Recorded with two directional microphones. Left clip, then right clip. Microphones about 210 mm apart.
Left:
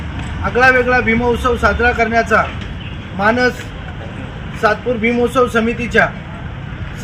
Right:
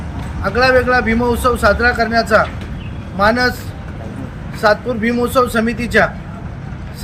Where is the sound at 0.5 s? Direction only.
10° right (ahead or behind).